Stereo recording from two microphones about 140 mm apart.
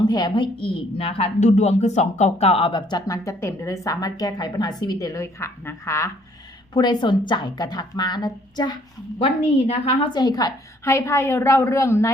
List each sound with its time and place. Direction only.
0.1 s a woman's voice: 30° left (ahead or behind)
2.8 s a woman's voice: 25° left (ahead or behind)
6.7 s a woman's voice: 30° left (ahead or behind)
9.1 s a woman's voice: 45° left (ahead or behind)
10.1 s a woman's voice: 30° left (ahead or behind)